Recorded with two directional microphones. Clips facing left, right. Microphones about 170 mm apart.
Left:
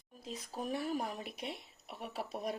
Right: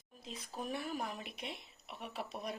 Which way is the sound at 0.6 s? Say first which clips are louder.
Left 3 dB; 35° left (ahead or behind).